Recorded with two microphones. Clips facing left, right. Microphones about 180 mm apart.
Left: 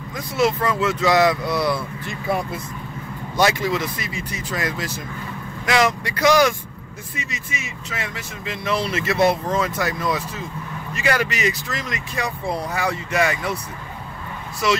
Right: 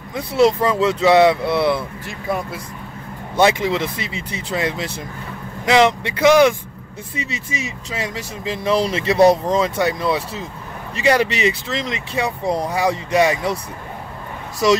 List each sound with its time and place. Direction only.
0.1 s speech: 30° right (ahead or behind)
2.0 s speech: centre (ahead or behind)
3.3 s speech: 25° right (ahead or behind)
5.9 s speech: 25° right (ahead or behind)
7.5 s speech: 35° right (ahead or behind)